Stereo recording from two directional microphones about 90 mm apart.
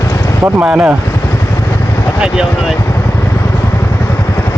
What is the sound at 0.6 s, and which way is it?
Speech, 10° right (ahead or behind).